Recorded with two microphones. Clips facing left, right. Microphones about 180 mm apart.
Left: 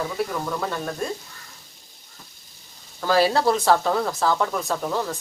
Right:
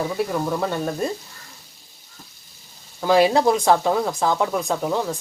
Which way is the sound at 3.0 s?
15° right (ahead or behind).